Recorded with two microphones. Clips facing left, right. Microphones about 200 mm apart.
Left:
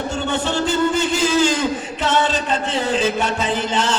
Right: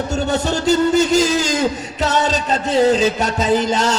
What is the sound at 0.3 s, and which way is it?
Speech, 40° right (ahead or behind).